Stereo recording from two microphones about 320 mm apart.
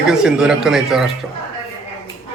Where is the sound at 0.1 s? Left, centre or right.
Centre.